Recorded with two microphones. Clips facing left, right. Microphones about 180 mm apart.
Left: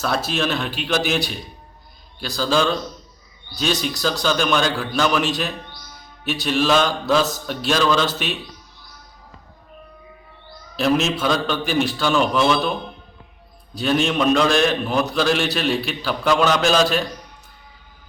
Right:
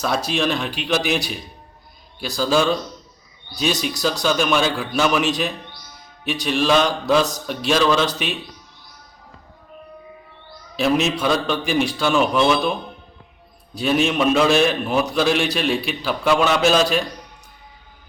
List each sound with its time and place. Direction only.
0.0 s a man's voice: centre (ahead or behind)
10.8 s a man's voice: centre (ahead or behind)
13.7 s a man's voice: centre (ahead or behind)